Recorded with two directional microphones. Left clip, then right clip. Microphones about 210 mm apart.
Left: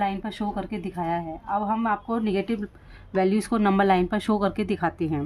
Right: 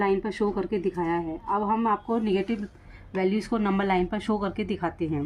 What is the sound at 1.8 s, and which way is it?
Speech, 40° left (ahead or behind).